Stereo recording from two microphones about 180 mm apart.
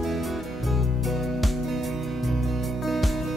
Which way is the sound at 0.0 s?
Centre (ahead or behind).